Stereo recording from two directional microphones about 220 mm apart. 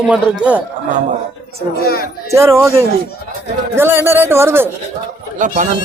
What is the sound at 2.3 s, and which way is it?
A man's voice, 15° right (ahead or behind).